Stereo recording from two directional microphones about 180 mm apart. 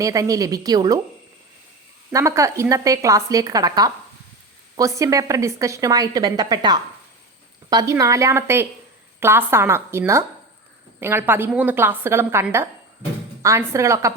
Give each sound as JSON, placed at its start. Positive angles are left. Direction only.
{"t": 0.0, "sound": "a woman's voice", "side_deg": -20}
{"t": 2.1, "sound": "a woman's voice", "side_deg": -15}